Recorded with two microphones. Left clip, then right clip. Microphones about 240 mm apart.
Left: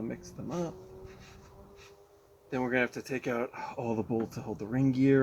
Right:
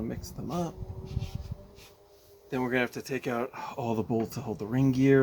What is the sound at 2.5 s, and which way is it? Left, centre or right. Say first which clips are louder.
Speech: right 1 dB; right.